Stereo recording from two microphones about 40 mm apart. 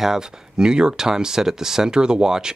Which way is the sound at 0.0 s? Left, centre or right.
Centre.